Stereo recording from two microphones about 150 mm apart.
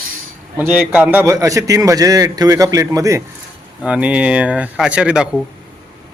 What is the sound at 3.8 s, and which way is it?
Speech, 10° right (ahead or behind).